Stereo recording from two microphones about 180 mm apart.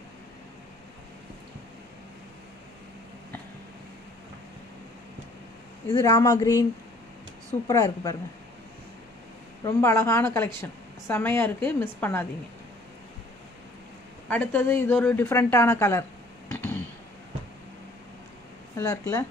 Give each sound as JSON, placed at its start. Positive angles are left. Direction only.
{"t": 6.0, "sound": "a woman's voice", "side_deg": 20}
{"t": 9.7, "sound": "a woman's voice", "side_deg": 15}
{"t": 14.3, "sound": "a woman's voice", "side_deg": 10}
{"t": 16.5, "sound": "a sound", "side_deg": 10}
{"t": 18.8, "sound": "a woman's voice", "side_deg": 20}